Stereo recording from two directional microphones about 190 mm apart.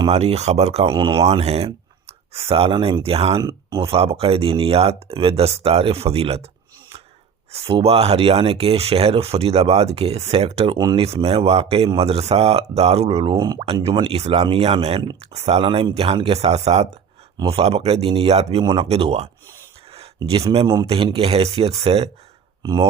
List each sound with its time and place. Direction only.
0.0 s speech: 35° right (ahead or behind)
7.5 s speech: 30° right (ahead or behind)
10.8 s speech: 20° right (ahead or behind)
11.0 s speech: 30° right (ahead or behind)
13.3 s speech: 20° right (ahead or behind)
20.9 s speech: 30° right (ahead or behind)
22.6 s speech: 20° right (ahead or behind)